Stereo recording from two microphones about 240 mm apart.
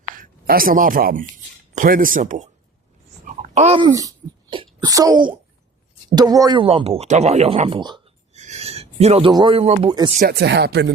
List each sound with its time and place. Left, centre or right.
0.1 s a woman's voice: right
3.2 s wail: right
6.1 s speech: centre
10.2 s speech: right